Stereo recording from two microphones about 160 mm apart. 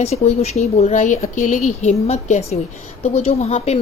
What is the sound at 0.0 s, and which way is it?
A woman's voice, 40° left (ahead or behind).